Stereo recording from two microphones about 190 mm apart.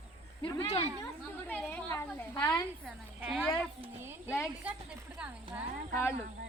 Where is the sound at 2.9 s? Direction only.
5° right (ahead or behind).